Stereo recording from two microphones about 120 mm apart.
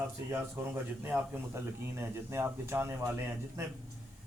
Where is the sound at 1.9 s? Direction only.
20° right (ahead or behind).